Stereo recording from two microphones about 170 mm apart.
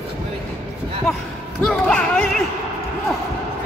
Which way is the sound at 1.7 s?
5° left (ahead or behind).